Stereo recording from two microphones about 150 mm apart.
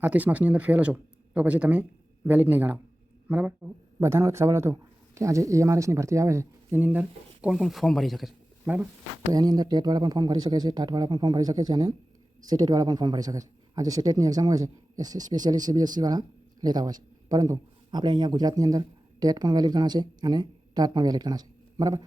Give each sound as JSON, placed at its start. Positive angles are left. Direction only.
{"t": 0.0, "sound": "a man's voice", "side_deg": -10}
{"t": 8.6, "sound": "speech", "side_deg": -10}
{"t": 9.3, "sound": "speech", "side_deg": -25}